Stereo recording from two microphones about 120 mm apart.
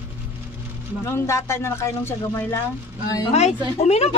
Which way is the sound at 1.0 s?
20° left (ahead or behind).